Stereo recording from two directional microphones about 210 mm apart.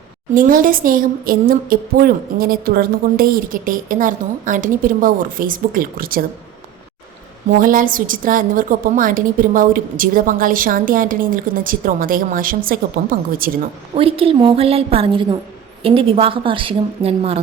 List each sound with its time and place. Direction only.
0.3 s a woman's voice: 40° right (ahead or behind)
7.6 s a woman's voice: 40° right (ahead or behind)
13.9 s a woman's voice: 25° right (ahead or behind)